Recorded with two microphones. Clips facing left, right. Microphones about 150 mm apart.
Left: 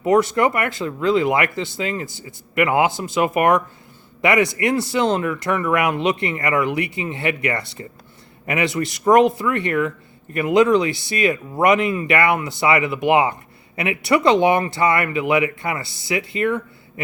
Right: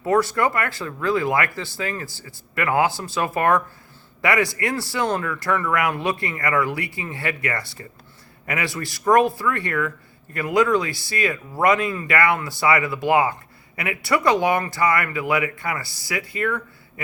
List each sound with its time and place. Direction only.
0.0 s speech: 20° left (ahead or behind)